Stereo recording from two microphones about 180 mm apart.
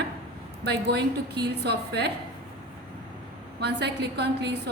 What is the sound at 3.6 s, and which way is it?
Speech, 65° right (ahead or behind).